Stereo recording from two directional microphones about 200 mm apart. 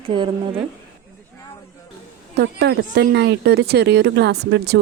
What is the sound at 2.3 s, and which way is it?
Speech, 55° right (ahead or behind).